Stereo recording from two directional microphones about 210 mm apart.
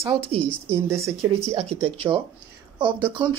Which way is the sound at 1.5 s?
30° right (ahead or behind).